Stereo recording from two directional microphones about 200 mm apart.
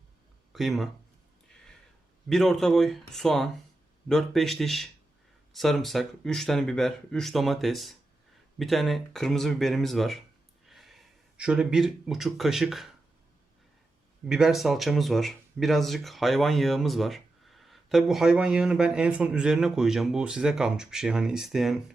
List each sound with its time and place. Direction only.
0.5 s speech: centre (ahead or behind)
2.3 s speech: centre (ahead or behind)
14.3 s speech: centre (ahead or behind)